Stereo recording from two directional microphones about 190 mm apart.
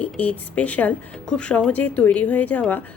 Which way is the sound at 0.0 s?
10° left (ahead or behind).